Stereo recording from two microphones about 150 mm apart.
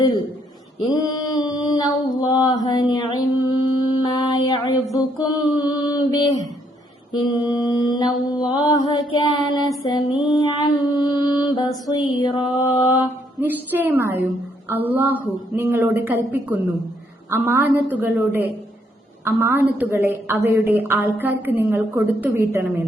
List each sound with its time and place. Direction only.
0.0 s a sound: 30° left (ahead or behind)
2.2 s mantra: 25° left (ahead or behind)
13.4 s a woman's voice: 10° right (ahead or behind)